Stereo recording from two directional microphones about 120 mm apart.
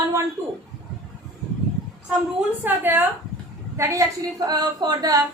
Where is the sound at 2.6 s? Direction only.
15° right (ahead or behind); by 5.2 s 30° right (ahead or behind).